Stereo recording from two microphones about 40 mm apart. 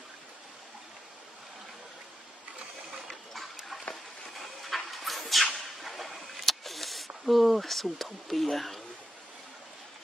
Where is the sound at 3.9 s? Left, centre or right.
Centre.